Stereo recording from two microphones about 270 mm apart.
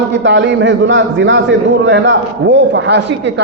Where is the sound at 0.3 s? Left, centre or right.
Right.